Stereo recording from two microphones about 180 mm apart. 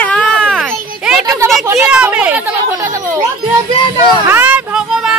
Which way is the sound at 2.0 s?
5° right (ahead or behind).